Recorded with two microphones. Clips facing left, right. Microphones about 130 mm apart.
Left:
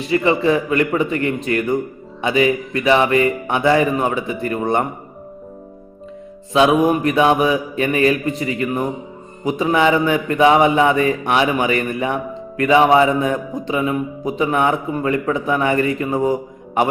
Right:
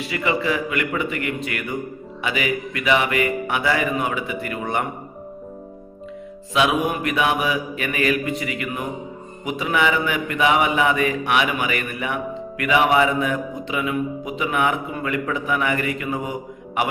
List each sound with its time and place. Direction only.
0.0 s mantra: 35° left (ahead or behind)
6.5 s mantra: 35° left (ahead or behind)